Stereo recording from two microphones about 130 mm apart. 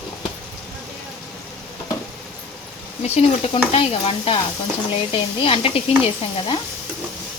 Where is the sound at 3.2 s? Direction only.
45° left (ahead or behind).